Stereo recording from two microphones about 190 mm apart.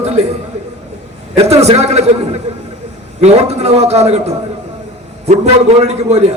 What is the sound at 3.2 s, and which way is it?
A man's voice, 35° right (ahead or behind).